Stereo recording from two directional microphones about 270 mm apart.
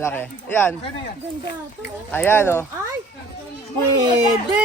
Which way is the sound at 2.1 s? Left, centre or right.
Centre.